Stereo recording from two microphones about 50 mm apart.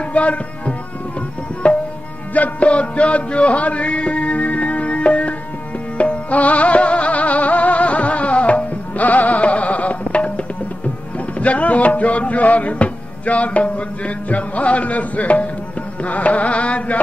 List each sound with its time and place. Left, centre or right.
0.1 s tabla: left
2.3 s music: left
16.0 s carnatic music: left